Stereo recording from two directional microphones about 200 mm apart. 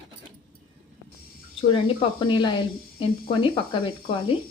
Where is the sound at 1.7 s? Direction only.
25° left (ahead or behind).